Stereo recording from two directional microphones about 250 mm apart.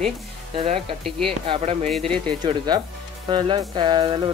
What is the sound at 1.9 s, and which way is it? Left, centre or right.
Speech, centre.